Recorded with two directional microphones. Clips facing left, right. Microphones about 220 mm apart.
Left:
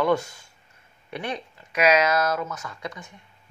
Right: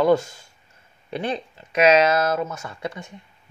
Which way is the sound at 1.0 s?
30° right (ahead or behind).